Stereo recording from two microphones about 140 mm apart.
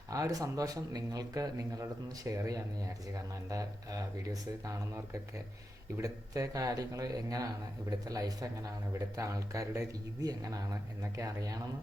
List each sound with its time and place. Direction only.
0.1 s speech: 25° right (ahead or behind)
6.0 s speech: 25° right (ahead or behind)